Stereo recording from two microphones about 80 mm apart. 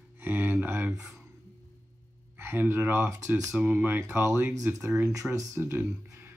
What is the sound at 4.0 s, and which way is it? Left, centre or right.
Speech, right.